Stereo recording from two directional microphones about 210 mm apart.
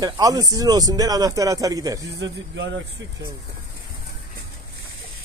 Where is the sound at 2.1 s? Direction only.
60° right (ahead or behind).